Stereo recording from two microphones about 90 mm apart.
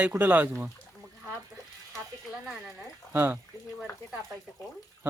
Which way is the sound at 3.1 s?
25° right (ahead or behind).